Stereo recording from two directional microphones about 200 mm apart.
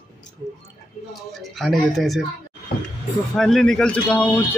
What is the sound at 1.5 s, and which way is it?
Speech, centre (ahead or behind).